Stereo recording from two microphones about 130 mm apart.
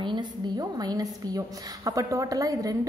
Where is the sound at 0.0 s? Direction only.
30° right (ahead or behind).